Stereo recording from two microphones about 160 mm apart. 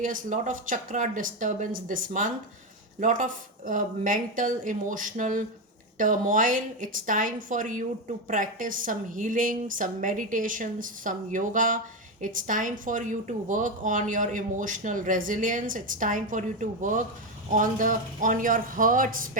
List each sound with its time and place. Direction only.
0.0 s speech: 55° right (ahead or behind)